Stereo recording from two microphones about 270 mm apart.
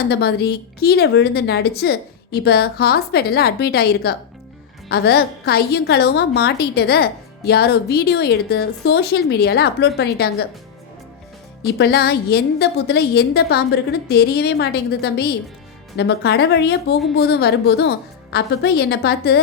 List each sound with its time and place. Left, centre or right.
0.1 s a woman's voice: left
11.6 s a woman's voice: left